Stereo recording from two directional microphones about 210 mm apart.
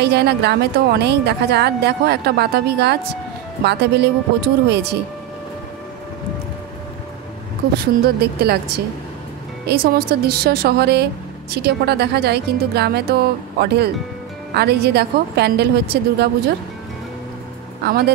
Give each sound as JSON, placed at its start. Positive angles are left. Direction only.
{"t": 0.0, "sound": "a woman's voice", "side_deg": -50}
{"t": 7.7, "sound": "a woman's voice", "side_deg": -50}
{"t": 17.8, "sound": "a woman's voice", "side_deg": -50}